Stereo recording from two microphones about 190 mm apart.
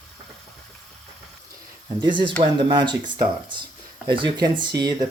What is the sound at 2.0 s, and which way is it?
Speech, 25° right (ahead or behind).